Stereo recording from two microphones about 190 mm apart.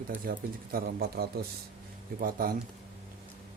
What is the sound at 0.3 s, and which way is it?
Speech, 50° right (ahead or behind).